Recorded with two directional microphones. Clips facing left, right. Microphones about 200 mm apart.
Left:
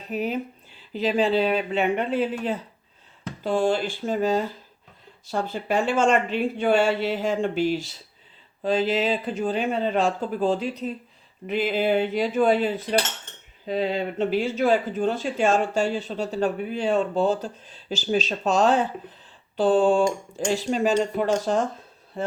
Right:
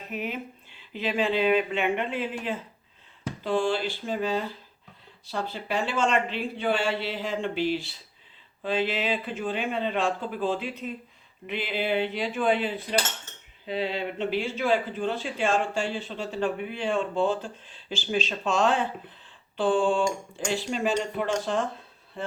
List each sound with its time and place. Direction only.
0.0 s speech: 35° left (ahead or behind)